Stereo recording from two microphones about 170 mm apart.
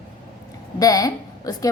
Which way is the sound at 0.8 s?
20° left (ahead or behind).